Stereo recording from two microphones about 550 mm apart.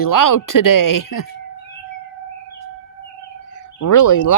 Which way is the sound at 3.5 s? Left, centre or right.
Left.